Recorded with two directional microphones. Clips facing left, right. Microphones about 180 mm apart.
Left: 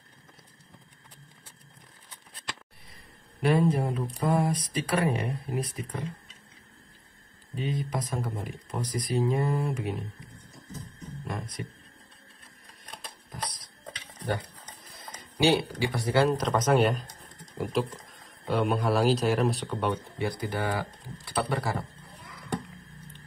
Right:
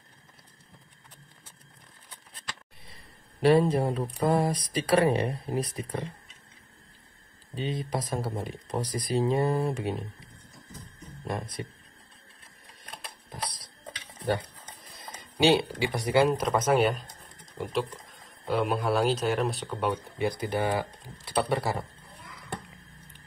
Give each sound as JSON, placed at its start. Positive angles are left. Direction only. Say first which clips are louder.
{"t": 3.4, "sound": "speech", "louder": "right 3 dB", "side_deg": -35}
{"t": 7.5, "sound": "speech", "louder": "even", "side_deg": -30}
{"t": 11.2, "sound": "speech", "louder": "right 3 dB", "side_deg": -30}
{"t": 15.3, "sound": "speech", "louder": "right 1 dB", "side_deg": -20}
{"t": 20.2, "sound": "speech", "louder": "right 2 dB", "side_deg": -20}